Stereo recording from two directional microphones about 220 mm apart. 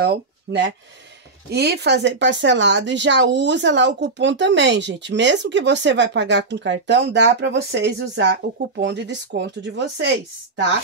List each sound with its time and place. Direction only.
0.0 s speech: 50° right (ahead or behind)